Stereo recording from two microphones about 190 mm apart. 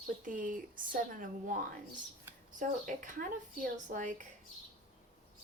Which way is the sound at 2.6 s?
45° right (ahead or behind).